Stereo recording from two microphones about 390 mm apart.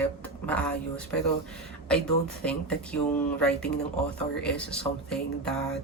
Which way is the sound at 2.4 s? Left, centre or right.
Centre.